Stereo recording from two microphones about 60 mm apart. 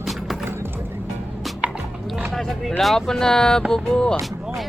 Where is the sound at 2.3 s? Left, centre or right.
Centre.